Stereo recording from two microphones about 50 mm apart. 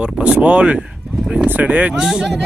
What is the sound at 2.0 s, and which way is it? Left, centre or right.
Speech, centre.